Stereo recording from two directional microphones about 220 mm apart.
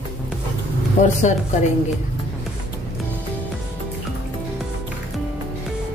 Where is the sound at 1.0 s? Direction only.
35° left (ahead or behind).